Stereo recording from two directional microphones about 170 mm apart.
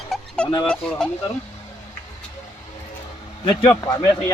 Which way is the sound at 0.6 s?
5° left (ahead or behind).